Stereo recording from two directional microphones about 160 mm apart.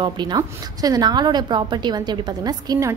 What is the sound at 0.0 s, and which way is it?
A woman's voice, 30° right (ahead or behind).